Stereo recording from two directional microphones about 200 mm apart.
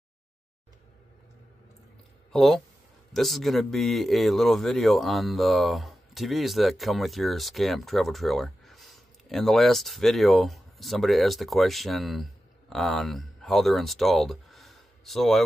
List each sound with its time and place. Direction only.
2.3 s a man's voice: centre (ahead or behind)